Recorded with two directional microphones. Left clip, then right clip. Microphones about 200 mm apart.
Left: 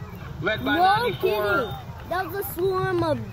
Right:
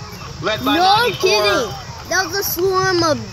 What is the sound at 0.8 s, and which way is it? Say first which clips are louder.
Speech: right 6 dB; 30° right (ahead or behind).